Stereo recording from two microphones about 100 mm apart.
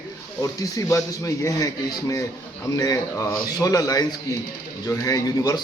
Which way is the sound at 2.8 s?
35° left (ahead or behind).